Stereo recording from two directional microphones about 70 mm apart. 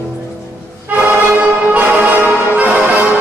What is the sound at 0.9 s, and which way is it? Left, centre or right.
Music, right.